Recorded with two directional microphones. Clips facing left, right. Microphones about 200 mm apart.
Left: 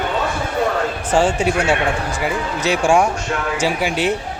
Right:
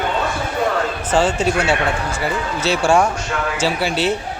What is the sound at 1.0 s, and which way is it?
A man's voice, 15° left (ahead or behind).